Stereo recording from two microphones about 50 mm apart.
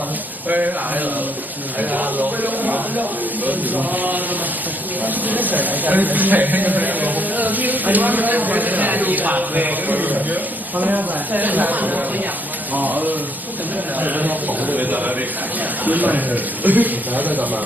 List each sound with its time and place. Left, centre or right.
0.4 s speech: right